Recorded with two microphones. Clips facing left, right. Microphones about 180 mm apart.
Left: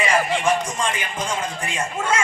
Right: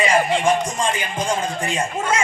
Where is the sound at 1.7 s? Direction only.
15° right (ahead or behind).